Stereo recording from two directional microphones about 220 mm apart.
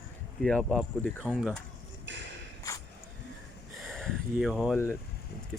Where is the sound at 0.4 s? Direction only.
5° left (ahead or behind).